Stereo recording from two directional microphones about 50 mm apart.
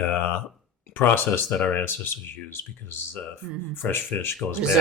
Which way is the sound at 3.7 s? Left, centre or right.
Left.